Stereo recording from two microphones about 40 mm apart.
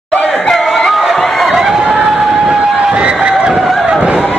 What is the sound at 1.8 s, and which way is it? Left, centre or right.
Vehicle, right.